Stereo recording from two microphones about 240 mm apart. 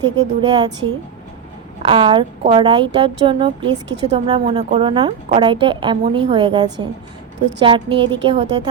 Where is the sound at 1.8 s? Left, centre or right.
Centre.